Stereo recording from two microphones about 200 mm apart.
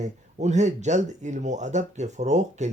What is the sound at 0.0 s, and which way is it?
Speech, 35° right (ahead or behind).